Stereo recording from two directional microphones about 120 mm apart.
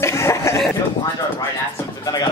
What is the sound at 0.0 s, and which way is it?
Chuckle, 25° left (ahead or behind).